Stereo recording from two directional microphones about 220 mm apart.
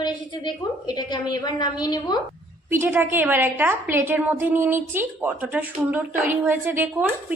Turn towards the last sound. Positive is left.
turn(degrees=-10)  # may be behind; listen again after turning